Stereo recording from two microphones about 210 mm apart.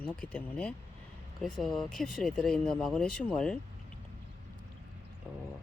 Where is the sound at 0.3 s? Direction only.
5° left (ahead or behind).